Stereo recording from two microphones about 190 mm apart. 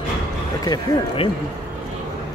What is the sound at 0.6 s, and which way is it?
Speech, 20° left (ahead or behind).